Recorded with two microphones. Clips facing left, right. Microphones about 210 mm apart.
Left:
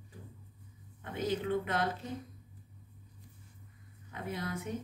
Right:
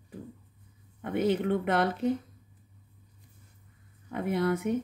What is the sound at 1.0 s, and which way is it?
Speech, 65° right (ahead or behind).